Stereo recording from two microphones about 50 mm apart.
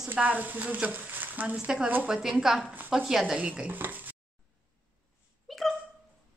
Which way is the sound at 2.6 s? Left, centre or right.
Right.